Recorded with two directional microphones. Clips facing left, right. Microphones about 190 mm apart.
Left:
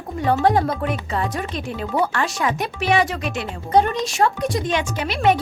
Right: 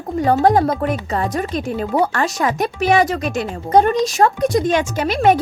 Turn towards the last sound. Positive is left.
turn(degrees=-45)  # may be behind; listen again after turning